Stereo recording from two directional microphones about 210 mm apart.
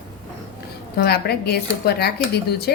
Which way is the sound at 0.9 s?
50° left (ahead or behind).